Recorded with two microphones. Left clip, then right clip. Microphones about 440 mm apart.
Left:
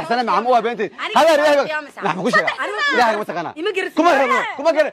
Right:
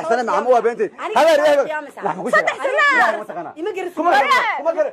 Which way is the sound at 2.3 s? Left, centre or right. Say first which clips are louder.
Right 1 dB; centre.